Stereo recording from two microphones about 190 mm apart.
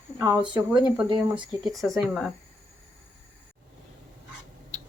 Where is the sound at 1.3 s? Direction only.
Centre (ahead or behind).